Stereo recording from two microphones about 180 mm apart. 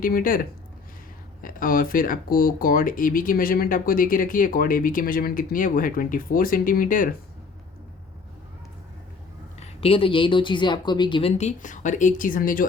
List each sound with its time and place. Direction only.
0.0 s speech: 50° left (ahead or behind)
9.6 s speech: 30° left (ahead or behind); by 12.6 s 50° left (ahead or behind)